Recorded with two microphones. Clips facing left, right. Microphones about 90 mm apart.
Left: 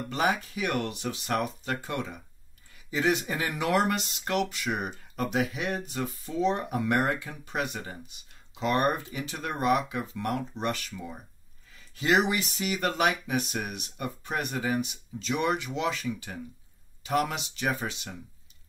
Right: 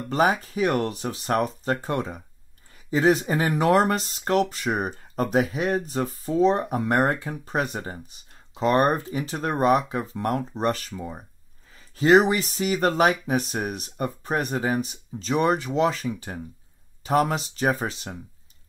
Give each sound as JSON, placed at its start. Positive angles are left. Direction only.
{"t": 0.1, "sound": "speech", "side_deg": -40}